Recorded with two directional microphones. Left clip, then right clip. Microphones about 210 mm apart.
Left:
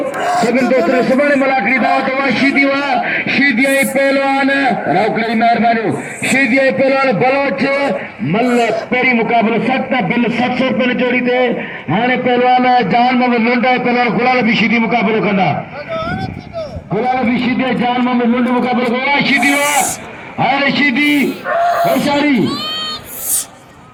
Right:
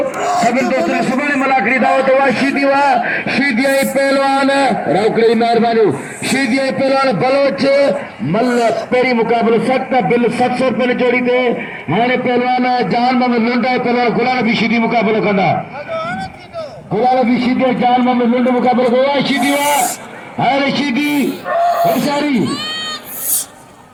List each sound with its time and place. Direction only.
0.2 s a sound: centre (ahead or behind)
0.7 s a man's voice: 35° right (ahead or behind)
15.9 s a sound: 50° left (ahead or behind)
17.0 s a man's voice: 45° right (ahead or behind)
21.4 s speech: centre (ahead or behind)
22.4 s crowd: 50° left (ahead or behind)